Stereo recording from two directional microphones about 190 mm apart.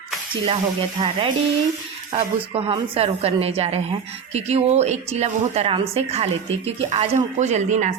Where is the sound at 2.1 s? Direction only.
30° right (ahead or behind).